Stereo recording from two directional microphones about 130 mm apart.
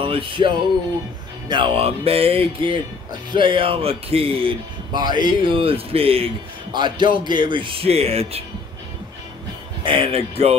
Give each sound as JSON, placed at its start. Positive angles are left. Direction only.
{"t": 0.0, "sound": "music", "side_deg": -40}
{"t": 1.5, "sound": "speech", "side_deg": -40}
{"t": 9.8, "sound": "speech", "side_deg": -45}